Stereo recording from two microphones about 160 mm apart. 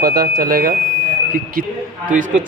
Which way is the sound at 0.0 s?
70° right (ahead or behind).